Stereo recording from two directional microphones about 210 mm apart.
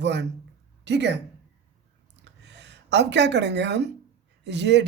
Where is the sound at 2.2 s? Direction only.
55° right (ahead or behind).